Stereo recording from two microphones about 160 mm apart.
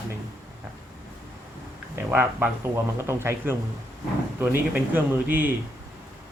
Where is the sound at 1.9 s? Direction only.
10° right (ahead or behind).